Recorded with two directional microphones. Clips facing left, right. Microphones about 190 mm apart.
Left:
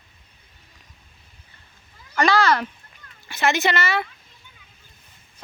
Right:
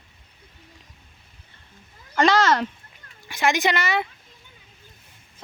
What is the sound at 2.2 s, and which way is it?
A woman's voice, 20° right (ahead or behind).